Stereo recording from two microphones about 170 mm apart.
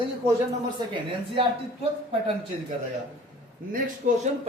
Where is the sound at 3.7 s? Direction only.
50° right (ahead or behind).